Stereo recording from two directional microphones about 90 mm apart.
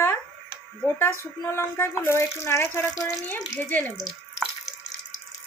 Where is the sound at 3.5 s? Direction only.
20° left (ahead or behind).